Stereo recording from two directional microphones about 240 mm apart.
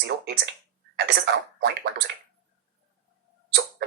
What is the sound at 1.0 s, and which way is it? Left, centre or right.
Throat clearing, right.